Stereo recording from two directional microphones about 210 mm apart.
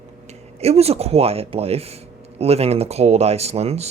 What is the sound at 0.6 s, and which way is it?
Speech, 30° right (ahead or behind).